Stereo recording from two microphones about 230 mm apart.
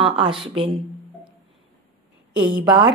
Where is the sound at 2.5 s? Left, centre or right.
Centre.